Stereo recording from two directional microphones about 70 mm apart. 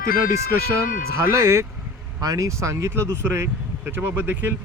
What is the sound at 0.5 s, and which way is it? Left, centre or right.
Speech, right.